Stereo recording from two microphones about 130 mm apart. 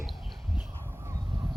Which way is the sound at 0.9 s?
20° right (ahead or behind).